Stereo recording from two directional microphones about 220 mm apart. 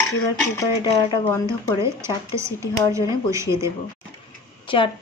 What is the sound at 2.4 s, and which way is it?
Speech, 15° right (ahead or behind).